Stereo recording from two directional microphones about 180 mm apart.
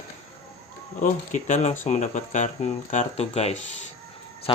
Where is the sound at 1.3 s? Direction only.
40° left (ahead or behind).